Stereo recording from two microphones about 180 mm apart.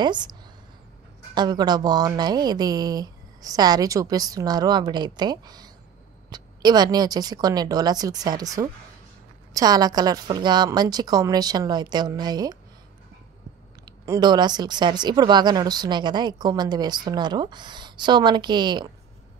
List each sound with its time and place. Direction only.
0.0 s speech: 25° right (ahead or behind)
14.0 s speech: 20° right (ahead or behind)